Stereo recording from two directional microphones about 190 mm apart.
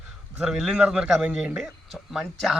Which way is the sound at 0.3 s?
5° right (ahead or behind).